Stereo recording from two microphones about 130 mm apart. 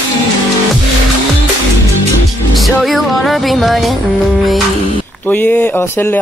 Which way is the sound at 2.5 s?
Centre (ahead or behind).